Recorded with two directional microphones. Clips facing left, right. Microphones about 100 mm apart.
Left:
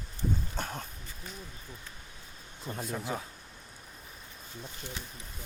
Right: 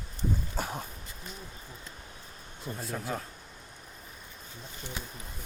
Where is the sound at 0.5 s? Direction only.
10° right (ahead or behind).